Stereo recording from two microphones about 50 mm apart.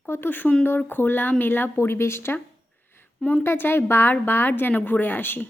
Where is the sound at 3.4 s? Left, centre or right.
Left.